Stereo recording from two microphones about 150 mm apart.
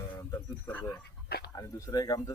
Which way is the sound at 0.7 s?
10° left (ahead or behind).